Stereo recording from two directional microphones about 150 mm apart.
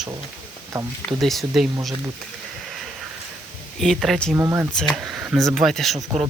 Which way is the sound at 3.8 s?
Centre (ahead or behind).